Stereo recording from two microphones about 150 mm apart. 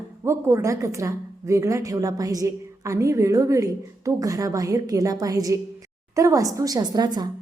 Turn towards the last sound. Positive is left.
turn(degrees=-25)  # may be behind; listen again after turning